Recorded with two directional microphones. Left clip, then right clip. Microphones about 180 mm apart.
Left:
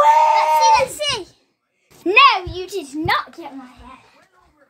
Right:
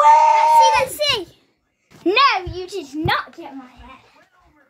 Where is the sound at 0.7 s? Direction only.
30° right (ahead or behind).